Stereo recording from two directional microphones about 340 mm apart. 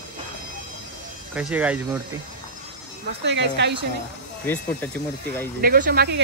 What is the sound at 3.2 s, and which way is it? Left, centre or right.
Speech, right.